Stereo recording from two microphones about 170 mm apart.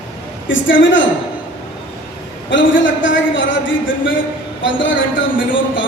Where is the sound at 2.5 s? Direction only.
90° left.